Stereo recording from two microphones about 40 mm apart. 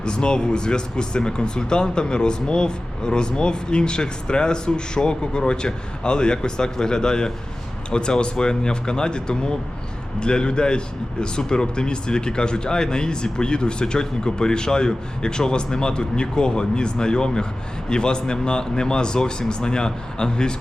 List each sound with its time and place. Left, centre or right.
0.0 s speech: left